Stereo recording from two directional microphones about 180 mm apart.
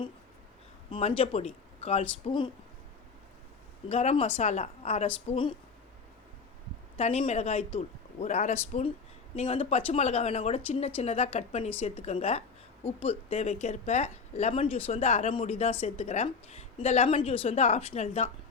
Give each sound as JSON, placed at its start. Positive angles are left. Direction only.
{"t": 0.9, "sound": "speech", "side_deg": 30}
{"t": 3.8, "sound": "speech", "side_deg": 35}
{"t": 6.9, "sound": "speech", "side_deg": 35}